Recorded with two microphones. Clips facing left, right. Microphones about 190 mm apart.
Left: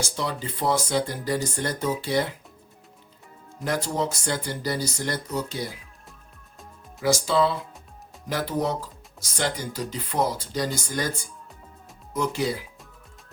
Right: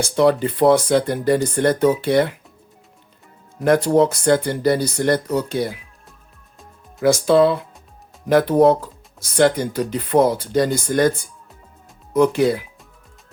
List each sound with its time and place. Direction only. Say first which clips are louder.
0.0 s speech: right 13 dB; 60° right (ahead or behind)
3.6 s speech: right 12 dB; 55° right (ahead or behind)
7.0 s speech: right 8 dB; 55° right (ahead or behind)